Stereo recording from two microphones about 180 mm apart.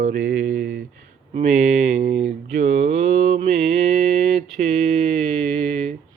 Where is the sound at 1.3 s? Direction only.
40° right (ahead or behind).